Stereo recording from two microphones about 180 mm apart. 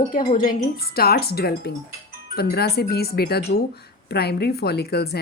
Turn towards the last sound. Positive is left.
turn(degrees=60)  # may be behind; listen again after turning